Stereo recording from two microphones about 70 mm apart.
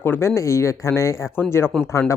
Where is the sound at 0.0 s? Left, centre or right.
Left.